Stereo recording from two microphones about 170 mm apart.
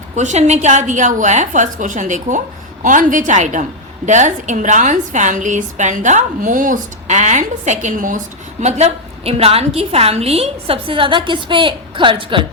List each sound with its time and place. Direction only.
0.2 s a woman's voice: 40° right (ahead or behind)
8.6 s a woman's voice: 40° right (ahead or behind)